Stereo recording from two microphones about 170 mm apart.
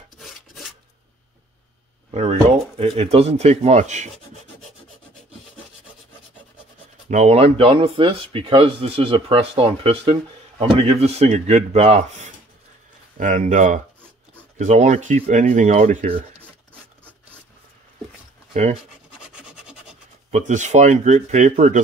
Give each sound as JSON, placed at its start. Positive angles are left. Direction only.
{"t": 0.2, "sound": "filing", "side_deg": 0}
{"t": 2.0, "sound": "a sound", "side_deg": -40}
{"t": 2.8, "sound": "speech", "side_deg": -35}
{"t": 7.1, "sound": "speech", "side_deg": -40}
{"t": 18.5, "sound": "speech", "side_deg": -45}
{"t": 20.2, "sound": "speech", "side_deg": -45}